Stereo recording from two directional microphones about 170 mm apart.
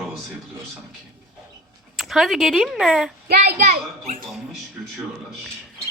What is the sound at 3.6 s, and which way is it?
Speech, 50° right (ahead or behind).